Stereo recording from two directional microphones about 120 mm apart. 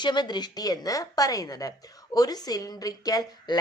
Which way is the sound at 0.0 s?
40° left (ahead or behind).